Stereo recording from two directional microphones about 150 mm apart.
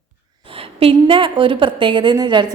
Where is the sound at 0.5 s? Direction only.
40° right (ahead or behind).